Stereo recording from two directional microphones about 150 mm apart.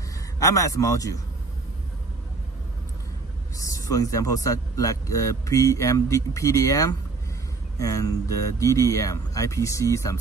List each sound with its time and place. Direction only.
0.4 s speech: 20° left (ahead or behind)
3.5 s speech: 20° left (ahead or behind)